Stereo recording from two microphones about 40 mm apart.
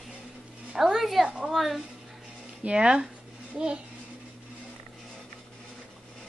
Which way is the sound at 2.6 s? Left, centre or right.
Right.